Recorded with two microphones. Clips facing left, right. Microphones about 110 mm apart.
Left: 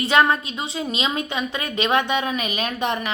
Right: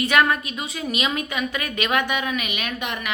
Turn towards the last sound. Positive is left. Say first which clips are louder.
# left 5 dB
turn(degrees=30)  # may be behind; listen again after turning